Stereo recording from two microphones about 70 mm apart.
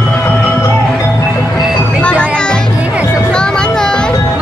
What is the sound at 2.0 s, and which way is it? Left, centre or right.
Music, centre.